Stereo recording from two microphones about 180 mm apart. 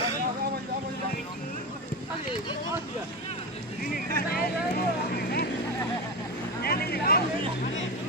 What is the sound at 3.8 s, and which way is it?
Speech, 50° left (ahead or behind).